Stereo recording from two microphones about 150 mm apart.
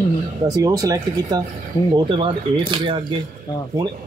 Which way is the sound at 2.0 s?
35° right (ahead or behind).